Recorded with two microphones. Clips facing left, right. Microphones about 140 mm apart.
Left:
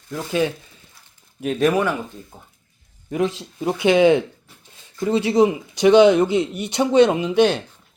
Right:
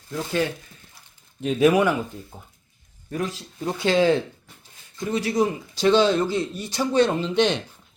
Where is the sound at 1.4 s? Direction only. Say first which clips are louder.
Right 1 dB; centre (ahead or behind).